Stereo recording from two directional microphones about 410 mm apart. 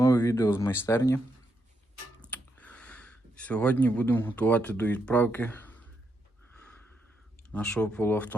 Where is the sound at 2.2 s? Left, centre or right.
Centre.